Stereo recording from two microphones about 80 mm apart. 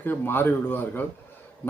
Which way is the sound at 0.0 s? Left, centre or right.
Left.